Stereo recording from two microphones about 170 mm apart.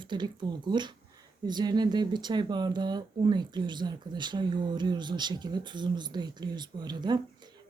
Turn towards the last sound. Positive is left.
turn(degrees=-25)  # may be behind; listen again after turning